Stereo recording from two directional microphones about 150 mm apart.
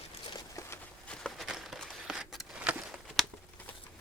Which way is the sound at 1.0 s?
5° left (ahead or behind).